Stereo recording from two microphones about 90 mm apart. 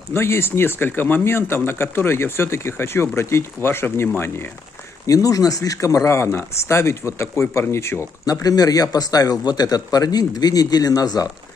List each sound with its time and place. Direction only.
0.1 s speech: 30° left (ahead or behind)
5.0 s speech: 40° left (ahead or behind)
8.3 s speech: 40° left (ahead or behind)